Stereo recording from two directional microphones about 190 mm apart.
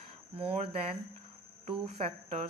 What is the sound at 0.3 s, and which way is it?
Speech, 30° right (ahead or behind).